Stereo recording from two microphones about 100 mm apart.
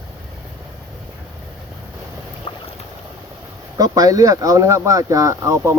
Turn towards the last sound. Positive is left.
turn(degrees=-30)  # may be behind; listen again after turning